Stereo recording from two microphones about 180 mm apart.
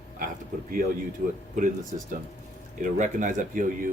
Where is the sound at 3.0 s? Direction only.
45° right (ahead or behind).